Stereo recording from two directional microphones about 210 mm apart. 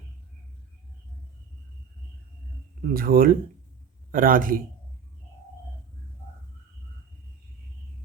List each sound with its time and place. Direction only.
2.8 s a man's voice: 45° right (ahead or behind)